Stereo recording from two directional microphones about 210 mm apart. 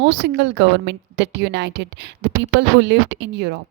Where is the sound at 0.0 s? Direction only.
55° right (ahead or behind).